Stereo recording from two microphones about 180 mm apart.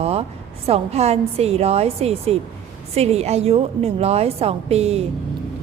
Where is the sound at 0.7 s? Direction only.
35° right (ahead or behind).